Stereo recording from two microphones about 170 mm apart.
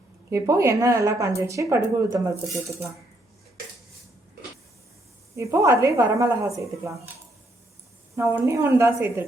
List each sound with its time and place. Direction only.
0.3 s a woman's voice: 15° right (ahead or behind)
5.4 s a woman's voice: 15° right (ahead or behind)
8.1 s a woman's voice: 15° right (ahead or behind)